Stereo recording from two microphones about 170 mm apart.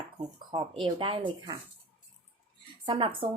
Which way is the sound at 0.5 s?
30° right (ahead or behind).